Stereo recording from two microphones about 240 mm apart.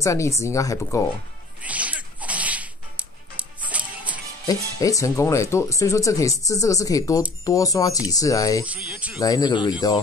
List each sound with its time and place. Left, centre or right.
0.0 s speech: centre
1.6 s sneeze: centre
3.7 s music: centre
4.5 s speech: centre
8.6 s speech: centre
9.2 s speech: centre